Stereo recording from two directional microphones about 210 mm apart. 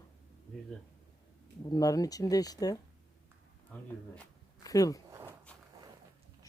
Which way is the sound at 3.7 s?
5° left (ahead or behind).